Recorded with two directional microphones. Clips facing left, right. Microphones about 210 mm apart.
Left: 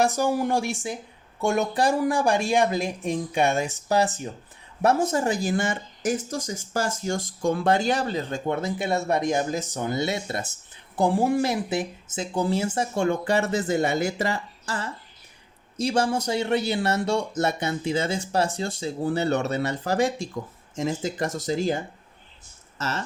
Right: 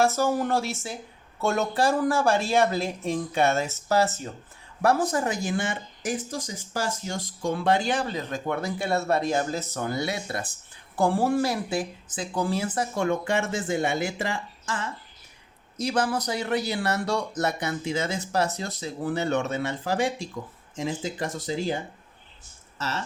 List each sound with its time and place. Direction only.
0.0 s speech: 15° left (ahead or behind); by 21.8 s 45° left (ahead or behind)